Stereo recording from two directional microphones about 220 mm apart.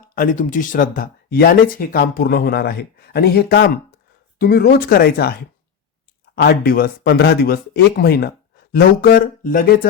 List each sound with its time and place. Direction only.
0.1 s speech: 35° left (ahead or behind)